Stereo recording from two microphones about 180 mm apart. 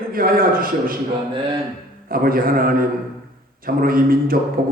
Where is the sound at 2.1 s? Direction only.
55° right (ahead or behind).